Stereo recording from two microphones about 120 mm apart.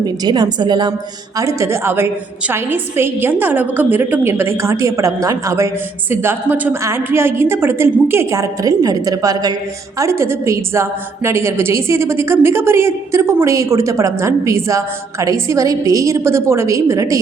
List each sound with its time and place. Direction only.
0.0 s a woman's voice: 35° right (ahead or behind)
1.4 s a woman's voice: 25° right (ahead or behind)